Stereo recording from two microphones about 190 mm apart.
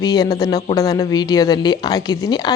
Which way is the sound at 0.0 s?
20° left (ahead or behind).